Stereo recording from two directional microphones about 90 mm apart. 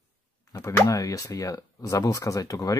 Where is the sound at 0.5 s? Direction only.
40° left (ahead or behind).